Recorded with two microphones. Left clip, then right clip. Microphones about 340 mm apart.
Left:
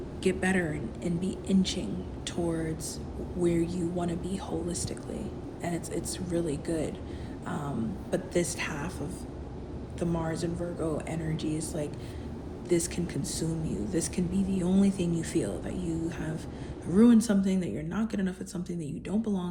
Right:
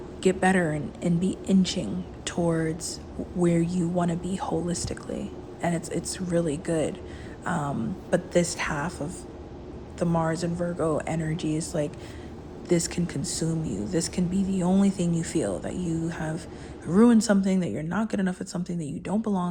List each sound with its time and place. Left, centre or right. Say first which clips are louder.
0.2 s a woman's voice: right 6 dB; centre
7.4 s a sound: right 8 dB; centre
8.1 s speech: right 6 dB; centre
10.0 s speech: right 6 dB; centre